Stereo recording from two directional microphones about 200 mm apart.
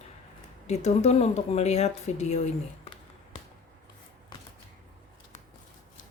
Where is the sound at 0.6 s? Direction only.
35° left (ahead or behind).